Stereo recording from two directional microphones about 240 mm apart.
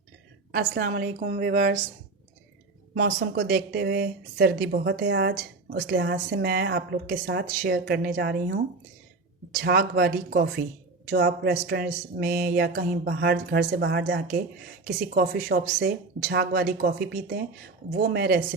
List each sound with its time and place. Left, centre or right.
0.5 s a woman's voice: right
2.9 s speech: right
9.6 s a woman's voice: right